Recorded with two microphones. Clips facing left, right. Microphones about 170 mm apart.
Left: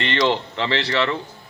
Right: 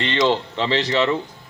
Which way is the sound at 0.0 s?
15° right (ahead or behind).